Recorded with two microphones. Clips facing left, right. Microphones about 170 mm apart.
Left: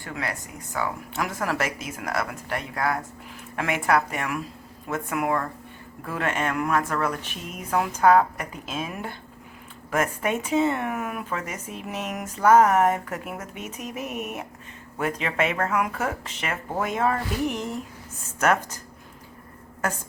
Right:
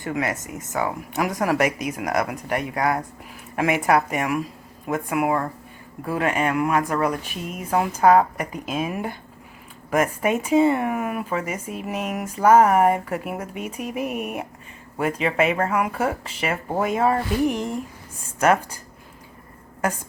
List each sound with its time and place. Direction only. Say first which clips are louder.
0.0 s speech: right 7 dB; 20° right (ahead or behind)